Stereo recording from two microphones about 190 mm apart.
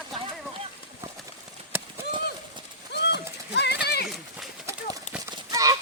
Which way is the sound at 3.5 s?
60° left (ahead or behind).